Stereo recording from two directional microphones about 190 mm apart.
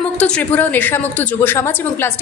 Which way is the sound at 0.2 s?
5° left (ahead or behind).